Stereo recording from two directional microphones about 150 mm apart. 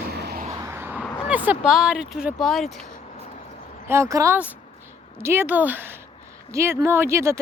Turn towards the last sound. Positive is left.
turn(degrees=-20)  # may be behind; listen again after turning